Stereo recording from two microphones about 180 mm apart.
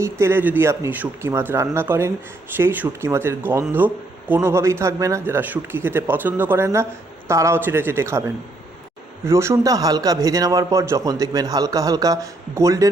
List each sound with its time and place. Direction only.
0.0 s speech: 15° right (ahead or behind)
9.2 s a man's voice: 15° right (ahead or behind)